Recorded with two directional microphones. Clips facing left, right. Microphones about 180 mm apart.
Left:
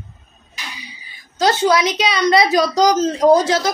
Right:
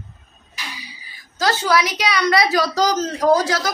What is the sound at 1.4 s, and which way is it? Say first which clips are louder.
A woman's voice: left 4 dB; 20° left (ahead or behind).